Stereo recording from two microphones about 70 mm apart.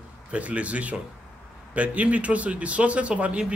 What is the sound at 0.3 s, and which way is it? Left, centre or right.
A man's voice, centre.